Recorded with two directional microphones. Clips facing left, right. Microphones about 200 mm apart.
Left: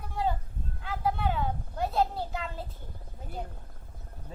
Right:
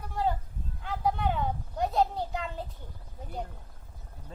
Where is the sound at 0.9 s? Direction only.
10° left (ahead or behind).